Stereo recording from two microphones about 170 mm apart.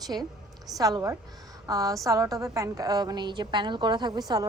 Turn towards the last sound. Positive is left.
turn(degrees=-25)  # may be behind; listen again after turning